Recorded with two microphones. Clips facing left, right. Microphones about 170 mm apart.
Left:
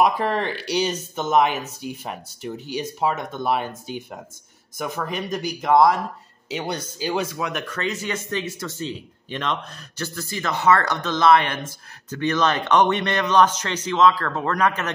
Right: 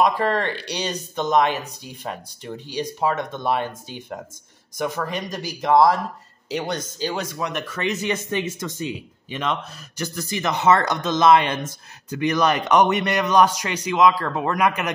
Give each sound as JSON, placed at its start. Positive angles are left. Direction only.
{"t": 0.0, "sound": "speech", "side_deg": 10}
{"t": 4.7, "sound": "speech", "side_deg": 0}
{"t": 7.0, "sound": "speech", "side_deg": 10}
{"t": 7.7, "sound": "speech", "side_deg": -20}